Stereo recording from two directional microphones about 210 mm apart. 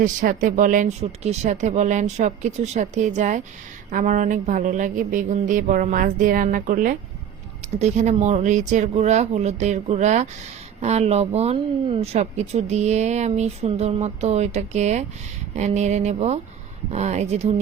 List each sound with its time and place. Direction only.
0.0 s speech: 40° right (ahead or behind)